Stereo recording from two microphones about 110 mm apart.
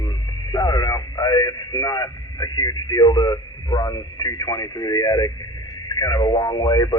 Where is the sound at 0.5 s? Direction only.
35° left (ahead or behind).